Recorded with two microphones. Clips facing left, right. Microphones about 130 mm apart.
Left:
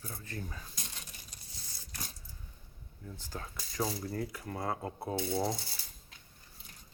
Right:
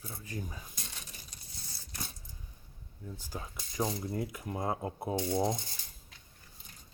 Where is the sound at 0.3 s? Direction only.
15° right (ahead or behind).